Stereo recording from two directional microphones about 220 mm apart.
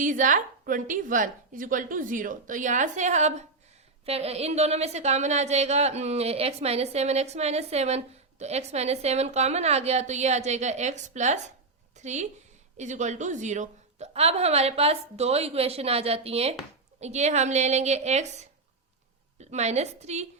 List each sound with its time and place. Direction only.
0.0 s a woman's voice: 35° right (ahead or behind)